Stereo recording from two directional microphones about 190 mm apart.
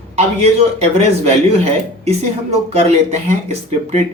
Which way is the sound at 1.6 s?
35° right (ahead or behind).